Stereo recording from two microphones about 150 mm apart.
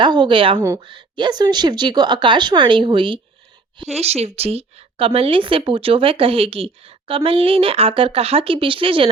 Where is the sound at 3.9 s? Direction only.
45° right (ahead or behind).